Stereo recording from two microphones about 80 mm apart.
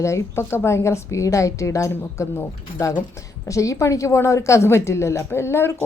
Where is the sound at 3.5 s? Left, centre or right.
Left.